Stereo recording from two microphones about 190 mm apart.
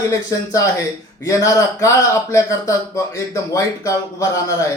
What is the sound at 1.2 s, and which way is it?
A man's voice, 15° left (ahead or behind).